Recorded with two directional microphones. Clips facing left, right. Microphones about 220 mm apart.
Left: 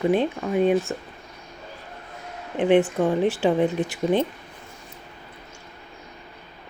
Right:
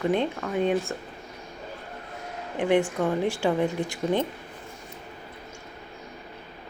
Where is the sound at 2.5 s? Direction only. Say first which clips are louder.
Left 4 dB; 20° left (ahead or behind).